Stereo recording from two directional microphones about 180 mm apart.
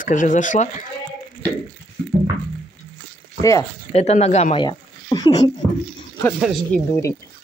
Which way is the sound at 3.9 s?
35° left (ahead or behind).